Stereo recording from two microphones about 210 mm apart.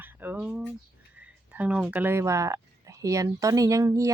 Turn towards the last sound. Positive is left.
turn(degrees=-15)  # may be behind; listen again after turning